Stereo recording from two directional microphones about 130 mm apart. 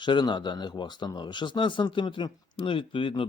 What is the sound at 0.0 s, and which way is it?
Speech, 35° left (ahead or behind).